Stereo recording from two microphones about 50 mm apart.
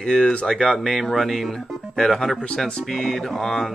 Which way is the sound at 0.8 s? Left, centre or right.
Centre.